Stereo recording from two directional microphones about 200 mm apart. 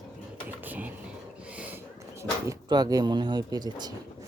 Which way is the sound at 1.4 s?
5° right (ahead or behind).